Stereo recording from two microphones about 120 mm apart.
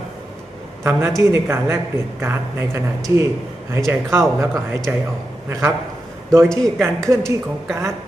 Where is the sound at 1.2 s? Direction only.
20° right (ahead or behind).